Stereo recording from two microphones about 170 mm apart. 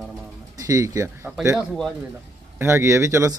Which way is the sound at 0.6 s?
20° right (ahead or behind).